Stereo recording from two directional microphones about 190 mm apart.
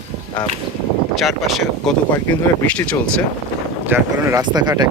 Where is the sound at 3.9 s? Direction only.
10° right (ahead or behind).